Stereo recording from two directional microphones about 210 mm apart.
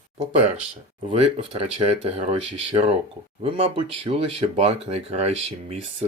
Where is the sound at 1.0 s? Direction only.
30° right (ahead or behind).